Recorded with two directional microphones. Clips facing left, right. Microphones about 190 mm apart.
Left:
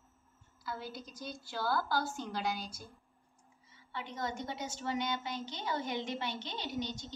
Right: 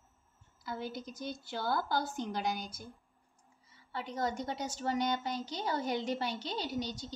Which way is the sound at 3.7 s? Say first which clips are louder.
Right 3 dB; 35° right (ahead or behind).